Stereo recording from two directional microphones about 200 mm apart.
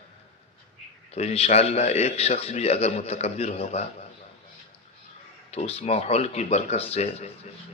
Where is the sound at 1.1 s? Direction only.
30° left (ahead or behind).